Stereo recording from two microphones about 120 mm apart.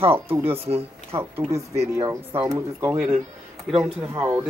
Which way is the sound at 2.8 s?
20° right (ahead or behind).